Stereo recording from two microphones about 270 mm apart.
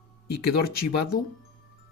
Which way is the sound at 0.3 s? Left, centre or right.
Left.